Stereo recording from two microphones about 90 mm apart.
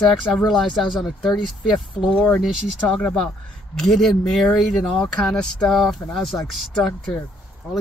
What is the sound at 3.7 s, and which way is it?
Speech, 5° left (ahead or behind).